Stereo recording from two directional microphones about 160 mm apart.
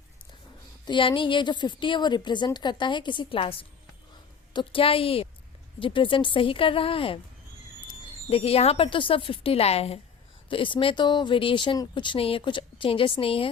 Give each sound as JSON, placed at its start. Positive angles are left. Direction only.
{"t": 0.9, "sound": "a woman's voice", "side_deg": 30}
{"t": 8.3, "sound": "speech", "side_deg": 40}